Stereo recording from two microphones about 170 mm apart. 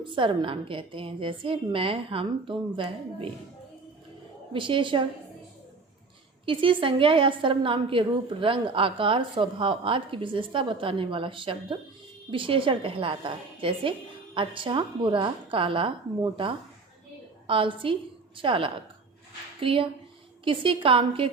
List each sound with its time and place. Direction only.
0.0 s a woman's voice: 30° right (ahead or behind)
4.5 s a woman's voice: 30° right (ahead or behind)
6.4 s a woman's voice: 30° right (ahead or behind)